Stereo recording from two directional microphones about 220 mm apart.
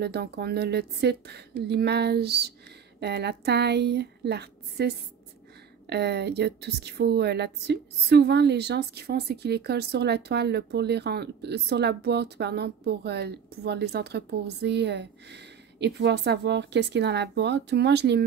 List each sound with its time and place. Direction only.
0.0 s speech: 45° right (ahead or behind)